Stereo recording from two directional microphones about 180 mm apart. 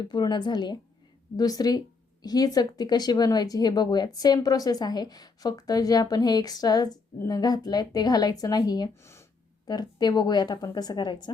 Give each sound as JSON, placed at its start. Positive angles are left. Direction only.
{"t": 0.0, "sound": "speech", "side_deg": 25}